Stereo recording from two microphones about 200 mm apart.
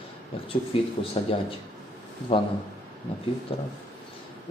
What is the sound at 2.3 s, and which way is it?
Speech, 25° left (ahead or behind).